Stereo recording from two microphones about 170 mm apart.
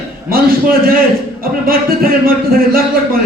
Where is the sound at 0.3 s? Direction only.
60° right (ahead or behind).